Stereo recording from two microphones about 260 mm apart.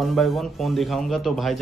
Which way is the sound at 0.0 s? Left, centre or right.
Centre.